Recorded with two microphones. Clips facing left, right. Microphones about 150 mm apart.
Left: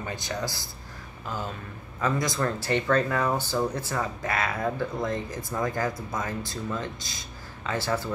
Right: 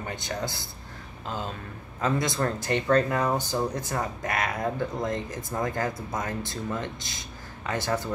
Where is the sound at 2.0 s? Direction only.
25° right (ahead or behind).